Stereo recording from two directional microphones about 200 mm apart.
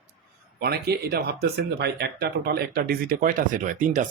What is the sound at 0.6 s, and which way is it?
Speech, 50° right (ahead or behind).